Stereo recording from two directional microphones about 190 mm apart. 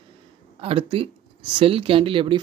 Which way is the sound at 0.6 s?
30° right (ahead or behind).